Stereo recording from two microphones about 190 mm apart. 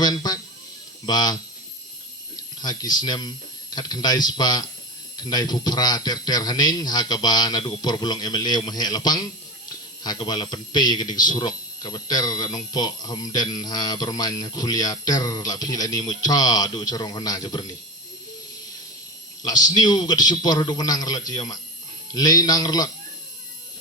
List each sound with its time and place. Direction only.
0.0 s a sound: 20° left (ahead or behind)
1.0 s speech: 20° left (ahead or behind)
19.5 s speech: 20° left (ahead or behind)